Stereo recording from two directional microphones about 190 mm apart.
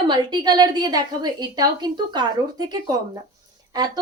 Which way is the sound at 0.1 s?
20° right (ahead or behind).